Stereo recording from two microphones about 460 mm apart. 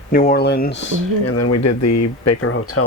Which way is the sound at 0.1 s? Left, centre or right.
Centre.